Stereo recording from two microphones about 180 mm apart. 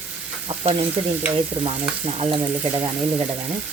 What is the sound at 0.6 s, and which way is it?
Sizzle, 35° right (ahead or behind).